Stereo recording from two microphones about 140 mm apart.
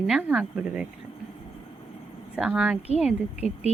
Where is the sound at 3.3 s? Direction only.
50° left (ahead or behind).